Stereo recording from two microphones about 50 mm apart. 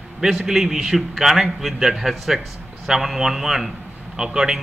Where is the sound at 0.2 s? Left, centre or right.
Centre.